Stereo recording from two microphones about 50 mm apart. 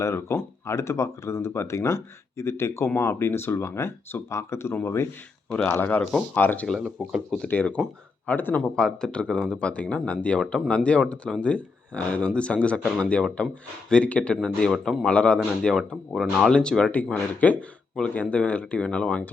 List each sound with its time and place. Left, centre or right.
0.0 s speech: left
5.5 s speech: left
5.8 s speech: left
6.7 s speech: centre
7.4 s speech: left
8.7 s speech: centre
14.7 s a man's voice: centre
15.0 s speech: left
15.6 s speech: centre
16.9 s speech: left